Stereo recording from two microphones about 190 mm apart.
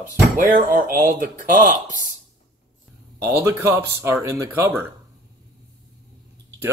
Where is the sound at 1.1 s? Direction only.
45° right (ahead or behind).